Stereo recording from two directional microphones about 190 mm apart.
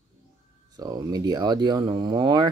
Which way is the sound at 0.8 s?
20° right (ahead or behind).